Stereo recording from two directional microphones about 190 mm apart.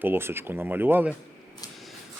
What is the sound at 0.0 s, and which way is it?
Speech, 10° right (ahead or behind).